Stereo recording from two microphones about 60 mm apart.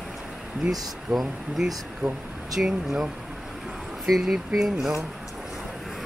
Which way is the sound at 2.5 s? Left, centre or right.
Centre.